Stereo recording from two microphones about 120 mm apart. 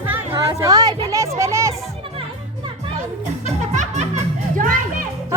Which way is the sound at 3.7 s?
75° right (ahead or behind).